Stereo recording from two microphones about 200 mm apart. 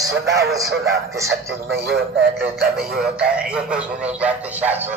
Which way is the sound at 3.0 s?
5° right (ahead or behind).